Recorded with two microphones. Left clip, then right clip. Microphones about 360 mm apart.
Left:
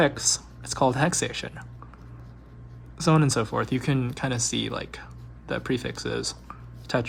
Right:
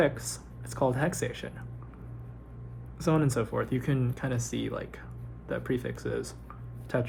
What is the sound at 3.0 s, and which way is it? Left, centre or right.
Speech, left.